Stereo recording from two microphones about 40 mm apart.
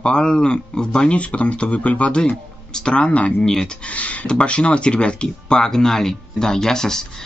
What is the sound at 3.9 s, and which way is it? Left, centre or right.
Speech, left.